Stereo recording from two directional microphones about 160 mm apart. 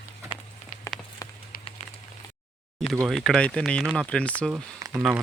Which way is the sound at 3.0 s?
Centre (ahead or behind).